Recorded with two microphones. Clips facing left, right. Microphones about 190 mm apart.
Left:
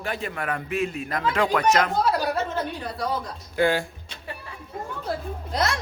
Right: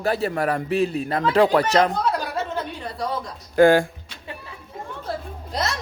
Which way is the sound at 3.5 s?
50° right (ahead or behind).